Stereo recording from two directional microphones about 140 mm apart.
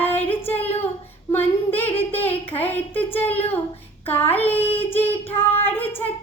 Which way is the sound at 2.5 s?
15° left (ahead or behind).